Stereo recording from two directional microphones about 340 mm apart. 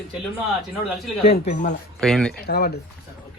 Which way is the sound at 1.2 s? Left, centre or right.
Centre.